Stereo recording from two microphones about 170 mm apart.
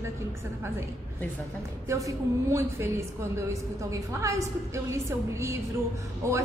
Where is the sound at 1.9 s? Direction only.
20° right (ahead or behind).